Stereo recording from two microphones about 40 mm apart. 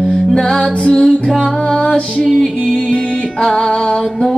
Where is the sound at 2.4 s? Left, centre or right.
Centre.